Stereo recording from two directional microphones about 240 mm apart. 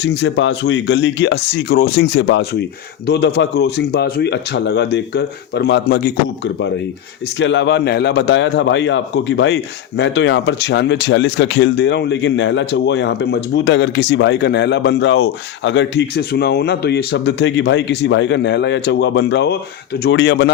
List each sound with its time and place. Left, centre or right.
0.0 s speech: left